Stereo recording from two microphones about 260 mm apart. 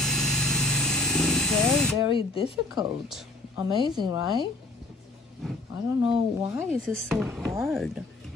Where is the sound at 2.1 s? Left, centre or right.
Left.